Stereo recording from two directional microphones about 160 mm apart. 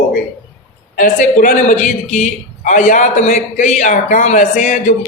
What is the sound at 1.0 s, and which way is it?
A man's voice, 55° left (ahead or behind).